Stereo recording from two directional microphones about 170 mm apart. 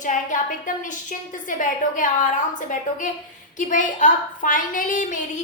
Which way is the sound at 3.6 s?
50° left (ahead or behind).